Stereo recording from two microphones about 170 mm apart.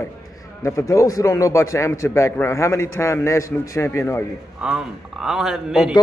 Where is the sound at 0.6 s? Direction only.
20° left (ahead or behind).